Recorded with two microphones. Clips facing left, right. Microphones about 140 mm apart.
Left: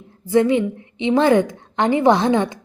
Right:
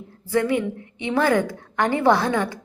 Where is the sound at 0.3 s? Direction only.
20° left (ahead or behind).